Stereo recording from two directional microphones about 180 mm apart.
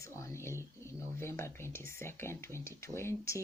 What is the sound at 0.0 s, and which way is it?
Speech, 15° left (ahead or behind).